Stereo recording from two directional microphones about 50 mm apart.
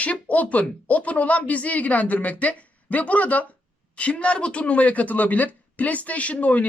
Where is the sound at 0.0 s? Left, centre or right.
Left.